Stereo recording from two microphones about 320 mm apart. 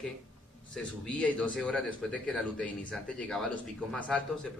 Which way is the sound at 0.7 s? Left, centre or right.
Centre.